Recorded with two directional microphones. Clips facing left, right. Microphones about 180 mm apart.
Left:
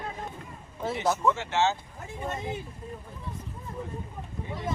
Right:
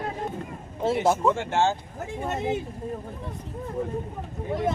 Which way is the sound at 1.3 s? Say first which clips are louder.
Right 3 dB; 50° right (ahead or behind).